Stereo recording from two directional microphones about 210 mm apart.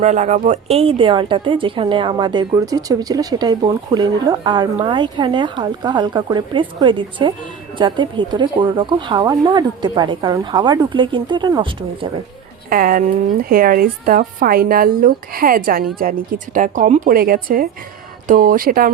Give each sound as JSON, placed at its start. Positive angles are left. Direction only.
{"t": 0.0, "sound": "a woman's voice", "side_deg": -35}
{"t": 12.7, "sound": "speech", "side_deg": -45}